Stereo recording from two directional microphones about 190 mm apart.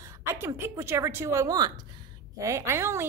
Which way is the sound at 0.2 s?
15° right (ahead or behind).